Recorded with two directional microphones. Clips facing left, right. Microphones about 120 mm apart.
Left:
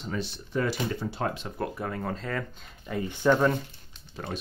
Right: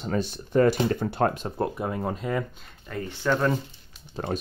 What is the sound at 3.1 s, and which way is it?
Speech, 15° left (ahead or behind).